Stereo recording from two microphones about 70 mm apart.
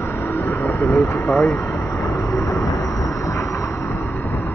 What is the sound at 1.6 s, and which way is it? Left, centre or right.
Vehicle, left.